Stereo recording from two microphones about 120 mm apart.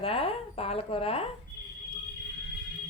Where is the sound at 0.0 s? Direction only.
55° left (ahead or behind).